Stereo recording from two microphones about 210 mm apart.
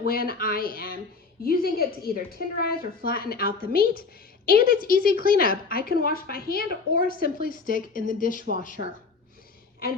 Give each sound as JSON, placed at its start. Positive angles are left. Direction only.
{"t": 0.0, "sound": "a woman's voice", "side_deg": 45}